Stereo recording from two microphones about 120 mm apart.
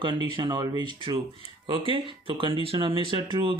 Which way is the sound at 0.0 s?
40° right (ahead or behind).